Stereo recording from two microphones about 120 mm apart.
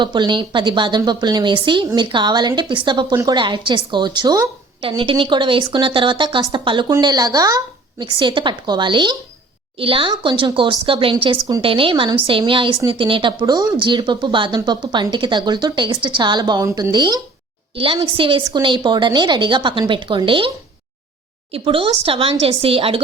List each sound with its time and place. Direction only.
0.0 s speech: 40° right (ahead or behind)
4.8 s speech: 50° right (ahead or behind)
13.4 s speech: 30° right (ahead or behind)
21.5 s speech: 50° right (ahead or behind)